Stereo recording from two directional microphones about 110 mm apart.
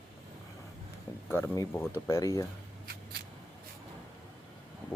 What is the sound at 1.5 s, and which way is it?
Speech, 20° left (ahead or behind).